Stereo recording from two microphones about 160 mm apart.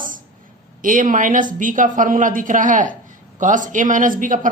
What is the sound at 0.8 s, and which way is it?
A man's voice, 60° right (ahead or behind).